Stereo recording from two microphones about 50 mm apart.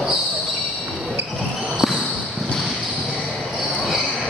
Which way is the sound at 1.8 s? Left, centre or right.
Centre.